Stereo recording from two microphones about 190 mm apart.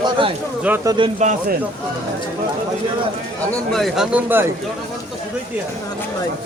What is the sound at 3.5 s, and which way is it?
Speech, centre (ahead or behind).